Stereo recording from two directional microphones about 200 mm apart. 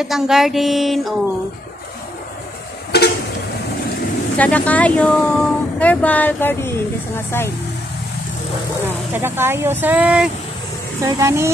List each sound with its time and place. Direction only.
0.0 s a sound: centre (ahead or behind)
2.9 s vehicle: 55° left (ahead or behind)
4.4 s speech: 5° left (ahead or behind)
8.8 s speech: 10° right (ahead or behind)